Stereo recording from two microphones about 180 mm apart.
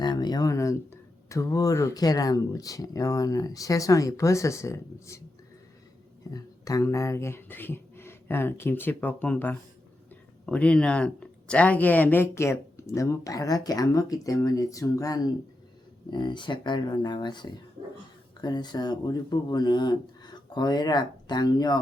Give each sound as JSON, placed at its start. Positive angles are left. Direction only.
{"t": 0.0, "sound": "speech", "side_deg": 25}
{"t": 6.3, "sound": "speech", "side_deg": 20}